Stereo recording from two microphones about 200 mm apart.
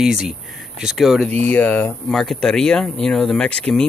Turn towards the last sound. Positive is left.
turn(degrees=5)  # may be behind; listen again after turning